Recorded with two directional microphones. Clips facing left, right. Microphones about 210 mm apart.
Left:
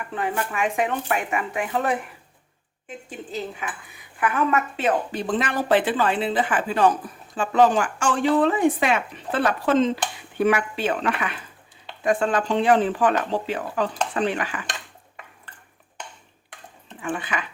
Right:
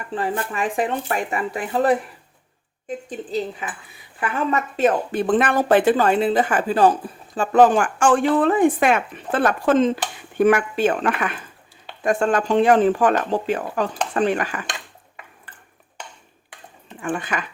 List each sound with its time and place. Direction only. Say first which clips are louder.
0.1 s speech: right 3 dB; 30° right (ahead or behind)
3.1 s speech: right 5 dB; 35° right (ahead or behind)
5.1 s speech: right 6 dB; 55° right (ahead or behind); by 7.1 s 30° right (ahead or behind)
7.3 s speech: right 3 dB; 45° right (ahead or behind)
17.0 s speech: right 3 dB; 45° right (ahead or behind)